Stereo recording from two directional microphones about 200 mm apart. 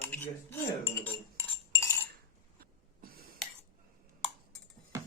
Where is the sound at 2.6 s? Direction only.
50° right (ahead or behind).